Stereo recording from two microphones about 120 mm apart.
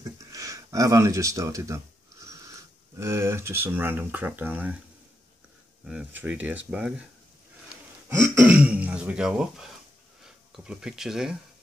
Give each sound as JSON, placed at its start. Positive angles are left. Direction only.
{"t": 0.0, "sound": "a sound", "side_deg": -30}
{"t": 3.0, "sound": "speech", "side_deg": -25}
{"t": 5.9, "sound": "speech", "side_deg": -10}
{"t": 8.1, "sound": "speech", "side_deg": -20}